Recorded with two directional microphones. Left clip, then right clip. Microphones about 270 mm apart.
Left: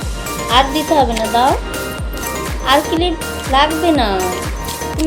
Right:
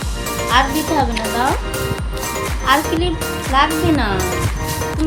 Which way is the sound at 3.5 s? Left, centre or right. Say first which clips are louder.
Left 3 dB; right.